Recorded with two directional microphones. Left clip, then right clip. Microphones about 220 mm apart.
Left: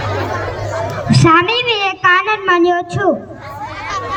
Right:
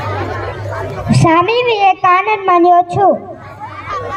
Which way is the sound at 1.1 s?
20° right (ahead or behind).